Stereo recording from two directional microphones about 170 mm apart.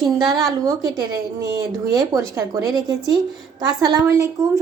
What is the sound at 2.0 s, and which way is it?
A woman's voice, 20° right (ahead or behind).